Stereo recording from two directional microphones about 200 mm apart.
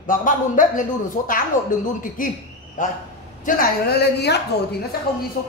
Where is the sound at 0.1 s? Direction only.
40° left (ahead or behind).